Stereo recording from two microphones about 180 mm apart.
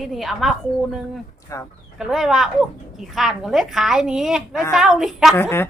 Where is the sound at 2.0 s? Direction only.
Centre (ahead or behind).